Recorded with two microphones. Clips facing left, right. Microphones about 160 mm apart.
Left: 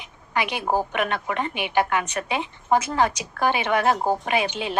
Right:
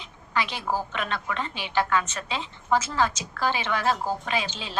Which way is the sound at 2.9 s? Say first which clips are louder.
Left 3 dB; 60° left (ahead or behind).